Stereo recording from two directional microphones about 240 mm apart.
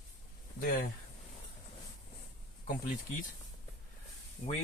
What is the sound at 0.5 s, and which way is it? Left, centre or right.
Speech, left.